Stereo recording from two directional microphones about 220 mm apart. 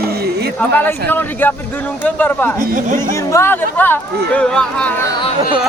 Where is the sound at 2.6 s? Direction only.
35° right (ahead or behind).